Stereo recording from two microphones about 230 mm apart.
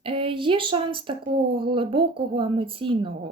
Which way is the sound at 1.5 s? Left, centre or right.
Right.